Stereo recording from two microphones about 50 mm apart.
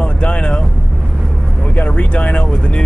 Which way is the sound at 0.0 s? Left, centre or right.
Left.